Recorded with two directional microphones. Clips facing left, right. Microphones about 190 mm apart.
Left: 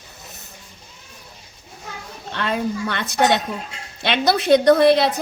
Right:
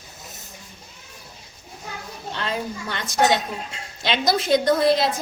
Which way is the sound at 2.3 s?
60° left (ahead or behind).